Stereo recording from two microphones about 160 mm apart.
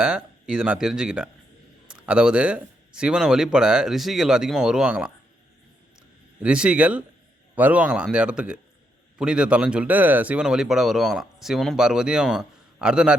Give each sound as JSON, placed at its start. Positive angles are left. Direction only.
{"t": 0.0, "sound": "speech", "side_deg": -5}
{"t": 6.0, "sound": "a sound", "side_deg": -5}
{"t": 7.5, "sound": "speech", "side_deg": -10}